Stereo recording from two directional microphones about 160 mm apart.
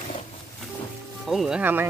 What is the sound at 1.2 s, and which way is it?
Speech, centre (ahead or behind).